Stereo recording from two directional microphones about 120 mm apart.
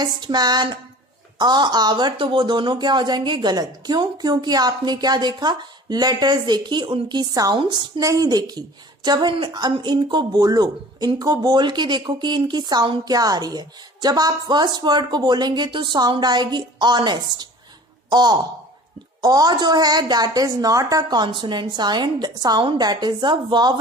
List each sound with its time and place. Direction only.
0.0 s speech: 35° right (ahead or behind)